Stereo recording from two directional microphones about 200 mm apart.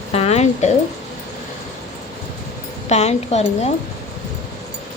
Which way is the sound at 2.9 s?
35° left (ahead or behind).